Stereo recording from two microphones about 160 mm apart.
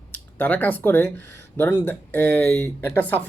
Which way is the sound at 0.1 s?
10° left (ahead or behind).